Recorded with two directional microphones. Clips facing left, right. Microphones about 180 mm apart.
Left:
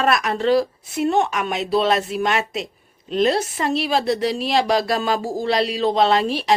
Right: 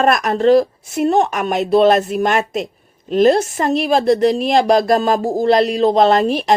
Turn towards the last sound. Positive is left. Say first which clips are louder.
# right 4 dB
turn(degrees=-45)  # may be behind; listen again after turning